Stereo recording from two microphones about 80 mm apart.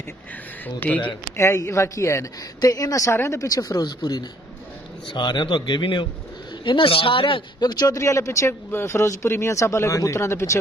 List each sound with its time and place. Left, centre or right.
0.7 s speech: centre
1.3 s a woman's voice: left
7.8 s speech: left